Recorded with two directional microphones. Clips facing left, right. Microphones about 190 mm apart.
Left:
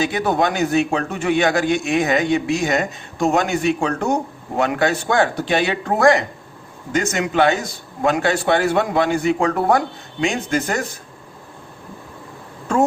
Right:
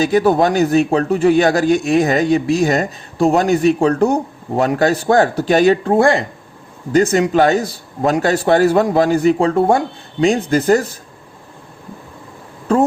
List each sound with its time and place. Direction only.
0.0 s a man's voice: 35° right (ahead or behind)
12.7 s a man's voice: 35° right (ahead or behind)